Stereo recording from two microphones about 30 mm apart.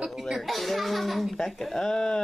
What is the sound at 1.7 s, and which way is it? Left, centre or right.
Speech, left.